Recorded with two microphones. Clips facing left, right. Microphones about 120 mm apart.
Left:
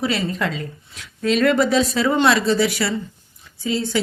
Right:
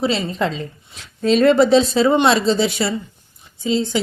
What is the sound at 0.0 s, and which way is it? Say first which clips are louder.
Speech: right 2 dB; 25° right (ahead or behind).